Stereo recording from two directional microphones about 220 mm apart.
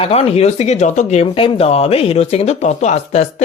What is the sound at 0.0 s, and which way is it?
Speech, 25° left (ahead or behind).